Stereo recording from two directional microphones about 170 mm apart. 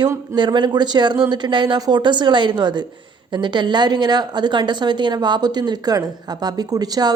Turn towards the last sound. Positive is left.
turn(degrees=-20)  # may be behind; listen again after turning